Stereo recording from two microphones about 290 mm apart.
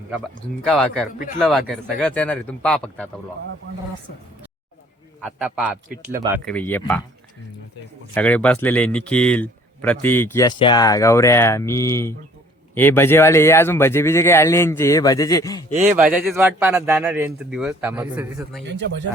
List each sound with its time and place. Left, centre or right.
0.6 s a man's voice: centre
5.2 s a man's voice: centre
6.5 s a man's voice: centre
8.1 s speech: centre
15.7 s speech: right
16.0 s a man's voice: centre